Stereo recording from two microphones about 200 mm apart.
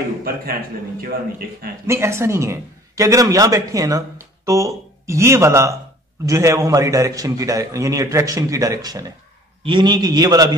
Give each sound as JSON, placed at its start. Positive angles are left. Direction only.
{"t": 1.9, "sound": "a man's voice", "side_deg": -15}